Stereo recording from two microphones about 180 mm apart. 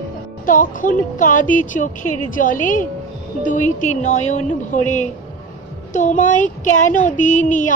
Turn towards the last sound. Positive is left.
turn(degrees=45)  # may be behind; listen again after turning